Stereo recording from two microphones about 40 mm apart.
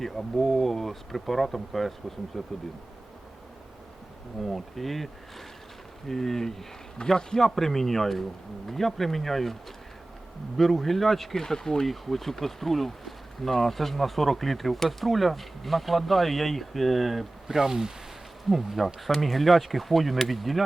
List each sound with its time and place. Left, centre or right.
0.0 s speech: centre
4.4 s speech: centre
6.1 s speech: centre
10.6 s speech: centre
18.4 s speech: centre